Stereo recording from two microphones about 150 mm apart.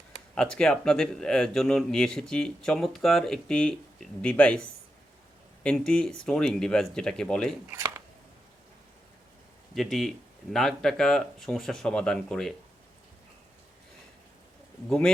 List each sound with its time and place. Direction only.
0.3 s speech: 5° left (ahead or behind)
5.6 s speech: 5° left (ahead or behind)
7.7 s shuffling cards: 20° right (ahead or behind)
9.7 s speech: centre (ahead or behind)
14.8 s speech: 5° left (ahead or behind)